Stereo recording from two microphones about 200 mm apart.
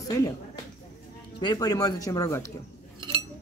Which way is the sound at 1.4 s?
20° left (ahead or behind).